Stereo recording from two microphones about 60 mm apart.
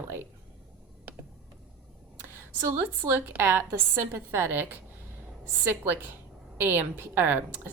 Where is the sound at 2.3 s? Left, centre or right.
Right.